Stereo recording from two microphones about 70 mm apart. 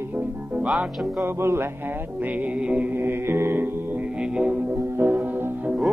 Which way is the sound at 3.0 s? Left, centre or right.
Right.